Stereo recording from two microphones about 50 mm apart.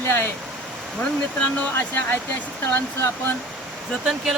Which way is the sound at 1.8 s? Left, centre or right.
Left.